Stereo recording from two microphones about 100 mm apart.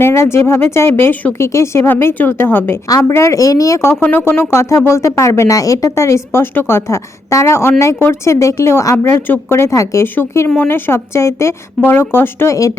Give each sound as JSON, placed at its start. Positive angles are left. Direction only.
{"t": 0.0, "sound": "speech", "side_deg": 25}